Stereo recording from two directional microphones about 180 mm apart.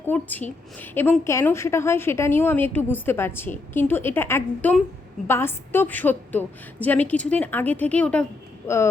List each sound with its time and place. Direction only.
0.0 s a woman's voice: 10° left (ahead or behind)